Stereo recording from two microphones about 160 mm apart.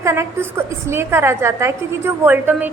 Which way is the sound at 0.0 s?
15° right (ahead or behind).